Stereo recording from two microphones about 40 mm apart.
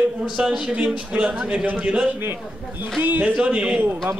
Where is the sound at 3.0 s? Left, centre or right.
Right.